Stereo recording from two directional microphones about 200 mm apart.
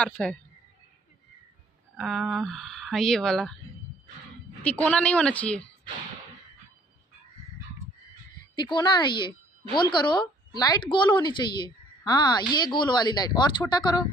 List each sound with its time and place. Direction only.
0.0 s speech: 5° left (ahead or behind)
2.0 s speech: centre (ahead or behind)
4.6 s a woman's voice: 5° left (ahead or behind)
8.5 s a woman's voice: 20° left (ahead or behind)